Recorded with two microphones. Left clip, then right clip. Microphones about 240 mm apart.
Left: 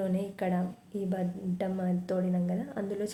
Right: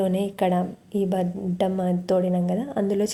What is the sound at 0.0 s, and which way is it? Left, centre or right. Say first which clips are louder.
A woman's voice: right 9 dB; right.